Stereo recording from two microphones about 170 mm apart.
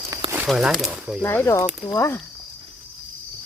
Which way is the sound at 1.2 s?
10° left (ahead or behind).